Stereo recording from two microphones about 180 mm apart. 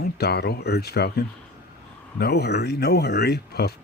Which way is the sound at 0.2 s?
65° left (ahead or behind).